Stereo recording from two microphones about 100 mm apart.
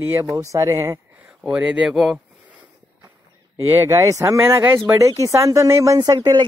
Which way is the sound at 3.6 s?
25° right (ahead or behind).